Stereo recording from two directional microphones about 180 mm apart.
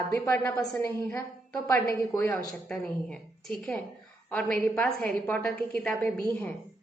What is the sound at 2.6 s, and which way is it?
A woman's voice, 5° left (ahead or behind).